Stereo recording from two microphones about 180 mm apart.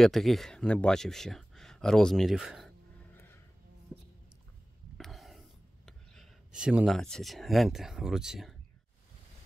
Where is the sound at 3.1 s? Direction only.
15° left (ahead or behind).